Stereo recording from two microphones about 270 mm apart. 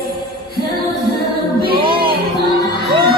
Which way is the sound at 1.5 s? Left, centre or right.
Centre.